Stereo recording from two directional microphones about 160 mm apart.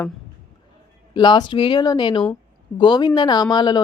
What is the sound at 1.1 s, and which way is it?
Speech, 30° left (ahead or behind).